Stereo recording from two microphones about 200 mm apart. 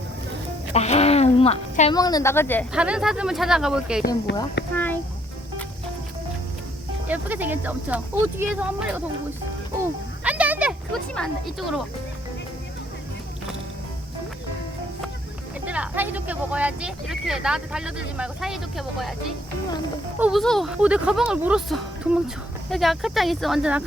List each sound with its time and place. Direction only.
0.7 s speech: 35° left (ahead or behind)
1.9 s speech: 20° left (ahead or behind)
2.7 s speech: 5° right (ahead or behind)
4.3 s speech: 60° left (ahead or behind)
4.7 s a sound: 10° left (ahead or behind)
7.1 s speech: 10° right (ahead or behind)
10.2 s a sound: 5° right (ahead or behind)
15.6 s speech: 5° right (ahead or behind)
20.1 s speech: 5° right (ahead or behind)